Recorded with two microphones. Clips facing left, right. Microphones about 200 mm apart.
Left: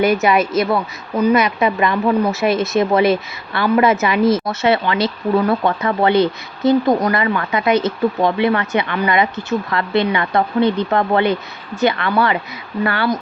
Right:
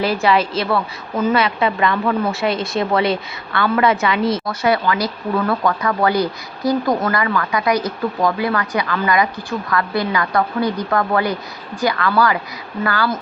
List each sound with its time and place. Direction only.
0.1 s speech: 20° left (ahead or behind)